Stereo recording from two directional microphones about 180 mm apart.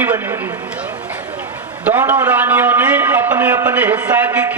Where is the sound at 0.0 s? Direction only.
10° right (ahead or behind).